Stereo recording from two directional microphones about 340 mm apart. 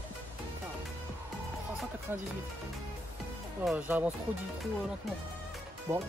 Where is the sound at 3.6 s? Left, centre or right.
Centre.